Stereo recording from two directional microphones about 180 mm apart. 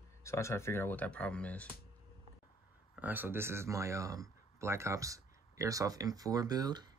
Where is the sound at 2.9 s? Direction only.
10° right (ahead or behind).